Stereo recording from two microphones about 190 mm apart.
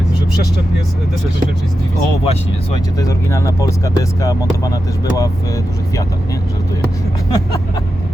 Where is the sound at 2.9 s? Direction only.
15° left (ahead or behind).